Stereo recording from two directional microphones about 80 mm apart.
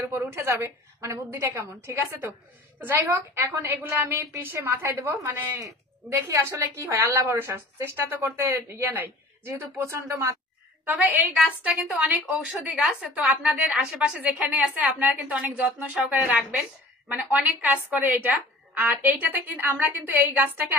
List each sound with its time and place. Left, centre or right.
0.0 s a woman's voice: right
10.9 s a woman's voice: right
11.3 s a woman's voice: centre